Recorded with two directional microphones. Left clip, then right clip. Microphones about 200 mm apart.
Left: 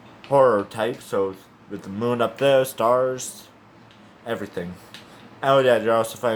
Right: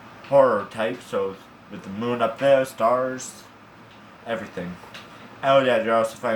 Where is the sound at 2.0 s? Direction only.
45° left (ahead or behind).